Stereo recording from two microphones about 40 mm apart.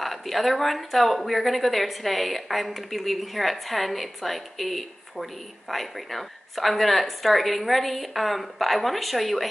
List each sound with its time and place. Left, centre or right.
0.0 s a woman's voice: centre